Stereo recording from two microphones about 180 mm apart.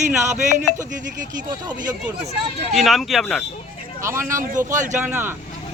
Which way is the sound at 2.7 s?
Centre (ahead or behind).